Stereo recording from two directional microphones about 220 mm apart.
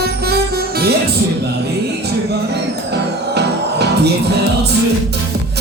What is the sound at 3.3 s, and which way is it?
Music, 50° right (ahead or behind).